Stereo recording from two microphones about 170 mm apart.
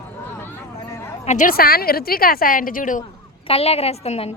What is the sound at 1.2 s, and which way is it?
A woman's voice, 45° left (ahead or behind).